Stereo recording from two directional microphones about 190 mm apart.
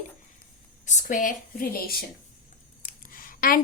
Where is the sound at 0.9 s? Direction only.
40° left (ahead or behind).